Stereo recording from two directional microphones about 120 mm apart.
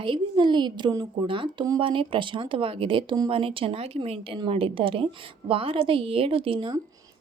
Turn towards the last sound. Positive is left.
turn(degrees=-45)  # may be behind; listen again after turning